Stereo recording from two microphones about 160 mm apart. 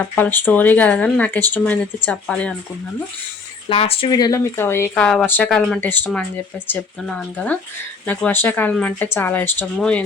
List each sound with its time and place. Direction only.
0.0 s speech: 10° left (ahead or behind)
3.7 s speech: 35° left (ahead or behind)
4.1 s speech: 20° left (ahead or behind); by 10.0 s 5° left (ahead or behind)